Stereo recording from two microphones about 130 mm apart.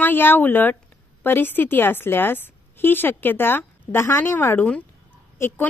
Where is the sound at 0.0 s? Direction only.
15° left (ahead or behind).